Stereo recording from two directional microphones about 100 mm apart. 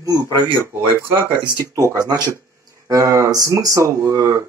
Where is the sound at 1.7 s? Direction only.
35° right (ahead or behind).